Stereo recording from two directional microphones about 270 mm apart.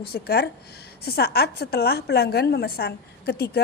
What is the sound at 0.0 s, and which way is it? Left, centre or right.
A woman's voice, left.